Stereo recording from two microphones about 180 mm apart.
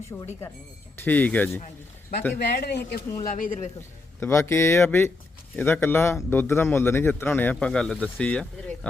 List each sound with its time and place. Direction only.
0.1 s speech: 15° left (ahead or behind)
2.3 s speech: 65° left (ahead or behind)
3.2 s speech: 50° left (ahead or behind)
4.2 s speech: 15° left (ahead or behind)